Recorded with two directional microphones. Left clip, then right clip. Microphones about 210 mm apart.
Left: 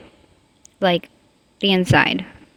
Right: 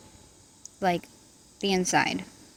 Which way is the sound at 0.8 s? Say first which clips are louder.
Left 8 dB; 40° left (ahead or behind).